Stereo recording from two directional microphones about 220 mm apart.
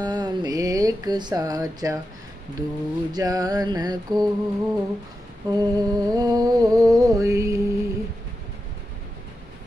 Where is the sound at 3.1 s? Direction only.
15° right (ahead or behind).